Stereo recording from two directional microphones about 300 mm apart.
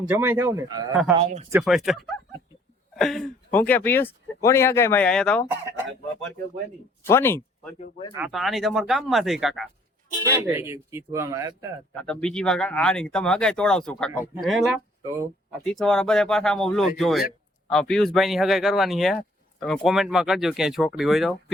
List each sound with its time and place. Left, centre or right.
0.1 s speech: centre
1.5 s speech: centre
7.0 s speech: centre
7.8 s speech: centre
8.1 s speech: centre
11.9 s speech: centre